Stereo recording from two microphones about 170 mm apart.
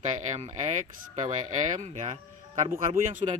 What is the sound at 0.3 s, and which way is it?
Speech, 40° right (ahead or behind).